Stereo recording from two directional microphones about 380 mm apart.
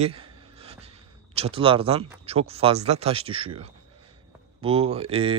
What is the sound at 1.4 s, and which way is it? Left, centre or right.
Speech, centre.